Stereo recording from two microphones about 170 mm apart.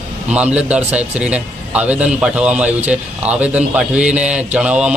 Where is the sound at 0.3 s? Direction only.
5° right (ahead or behind).